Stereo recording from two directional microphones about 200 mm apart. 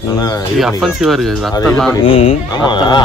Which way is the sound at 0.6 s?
Centre (ahead or behind).